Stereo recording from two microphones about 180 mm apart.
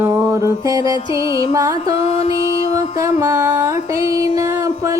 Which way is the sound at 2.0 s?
35° left (ahead or behind).